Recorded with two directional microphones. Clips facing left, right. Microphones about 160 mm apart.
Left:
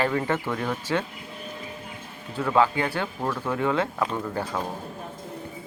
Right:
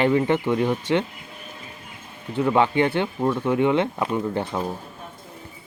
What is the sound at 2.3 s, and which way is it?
Speech, 20° right (ahead or behind).